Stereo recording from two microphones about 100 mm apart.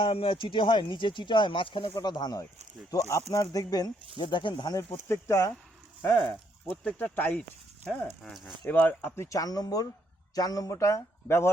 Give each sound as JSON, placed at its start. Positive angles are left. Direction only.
{"t": 0.0, "sound": "speech", "side_deg": 65}
{"t": 2.0, "sound": "a man's voice", "side_deg": 45}
{"t": 4.2, "sound": "speech", "side_deg": 50}
{"t": 4.8, "sound": "speech", "side_deg": 25}
{"t": 8.2, "sound": "speech", "side_deg": 0}
{"t": 8.6, "sound": "a man's voice", "side_deg": 15}